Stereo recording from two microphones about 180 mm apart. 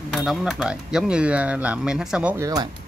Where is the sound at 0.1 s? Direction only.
Centre (ahead or behind).